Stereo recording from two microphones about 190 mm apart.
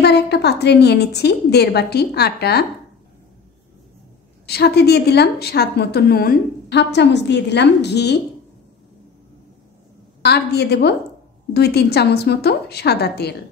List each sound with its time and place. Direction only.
0.0 s a woman's voice: 60° left (ahead or behind)
4.5 s a woman's voice: 60° left (ahead or behind)
10.2 s a woman's voice: 60° left (ahead or behind)